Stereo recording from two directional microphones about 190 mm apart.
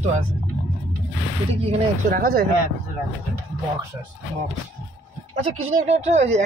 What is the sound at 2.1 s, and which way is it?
Speech, 50° right (ahead or behind).